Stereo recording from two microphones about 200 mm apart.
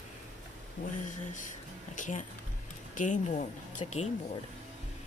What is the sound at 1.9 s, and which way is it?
Speech, 40° left (ahead or behind).